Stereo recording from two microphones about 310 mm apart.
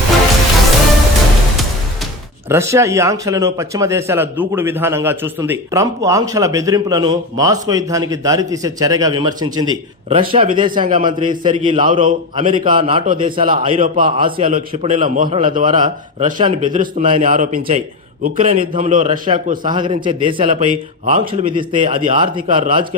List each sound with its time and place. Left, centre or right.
2.5 s a man's voice: centre